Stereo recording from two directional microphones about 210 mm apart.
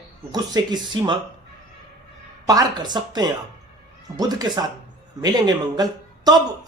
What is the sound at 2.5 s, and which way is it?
Speech, 20° right (ahead or behind).